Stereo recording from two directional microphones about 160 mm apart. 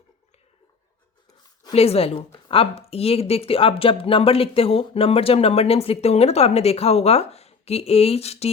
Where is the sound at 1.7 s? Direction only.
40° left (ahead or behind).